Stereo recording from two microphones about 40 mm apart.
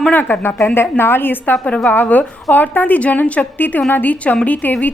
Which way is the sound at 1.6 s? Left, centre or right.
Left.